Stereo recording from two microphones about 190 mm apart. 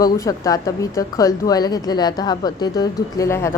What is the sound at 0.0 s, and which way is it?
Speech, 20° left (ahead or behind).